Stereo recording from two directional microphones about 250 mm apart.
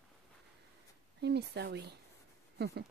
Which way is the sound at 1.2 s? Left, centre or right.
Right.